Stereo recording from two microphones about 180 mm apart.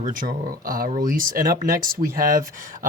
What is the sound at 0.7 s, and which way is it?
Speech, 50° right (ahead or behind).